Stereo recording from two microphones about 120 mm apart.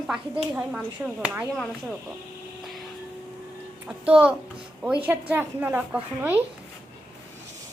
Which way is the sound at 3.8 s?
10° right (ahead or behind).